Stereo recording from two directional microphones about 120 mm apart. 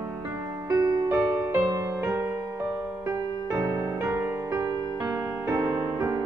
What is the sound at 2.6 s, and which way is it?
Music, 5° right (ahead or behind).